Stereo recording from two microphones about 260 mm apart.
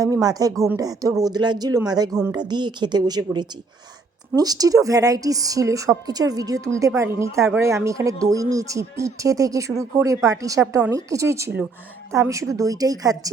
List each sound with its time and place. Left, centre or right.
0.0 s a woman's voice: centre